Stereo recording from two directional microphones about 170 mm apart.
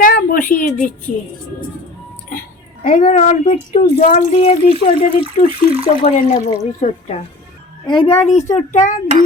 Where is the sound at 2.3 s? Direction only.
55° left (ahead or behind); by 4.7 s 40° left (ahead or behind).